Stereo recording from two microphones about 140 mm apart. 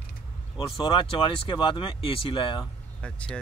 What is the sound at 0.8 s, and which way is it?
Speech, 35° left (ahead or behind).